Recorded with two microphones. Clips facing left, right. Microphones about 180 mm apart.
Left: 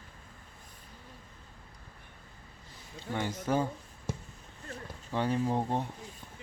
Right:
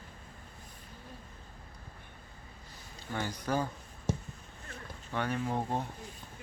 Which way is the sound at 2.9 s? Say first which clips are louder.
Left 3 dB; 25° left (ahead or behind).